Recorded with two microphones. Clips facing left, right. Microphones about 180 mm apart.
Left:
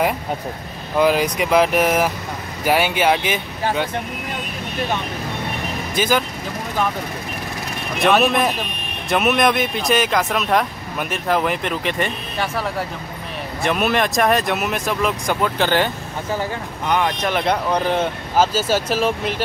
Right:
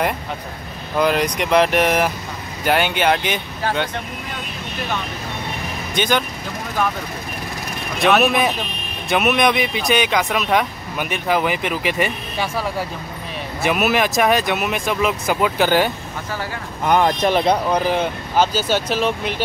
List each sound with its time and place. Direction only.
0.9 s speech: 5° left (ahead or behind)
5.9 s speech: 5° left (ahead or behind)
8.0 s speech: centre (ahead or behind)
16.8 s speech: 45° right (ahead or behind)
17.5 s speech: 5° right (ahead or behind)